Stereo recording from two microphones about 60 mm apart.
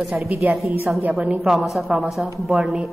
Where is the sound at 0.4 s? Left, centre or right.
Right.